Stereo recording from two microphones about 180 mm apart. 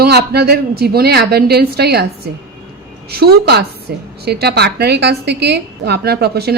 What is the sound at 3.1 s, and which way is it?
A woman's voice, 65° right (ahead or behind).